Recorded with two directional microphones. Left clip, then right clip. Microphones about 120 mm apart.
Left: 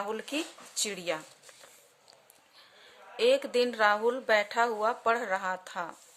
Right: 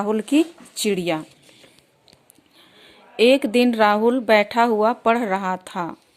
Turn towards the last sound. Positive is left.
turn(degrees=-30)  # may be behind; listen again after turning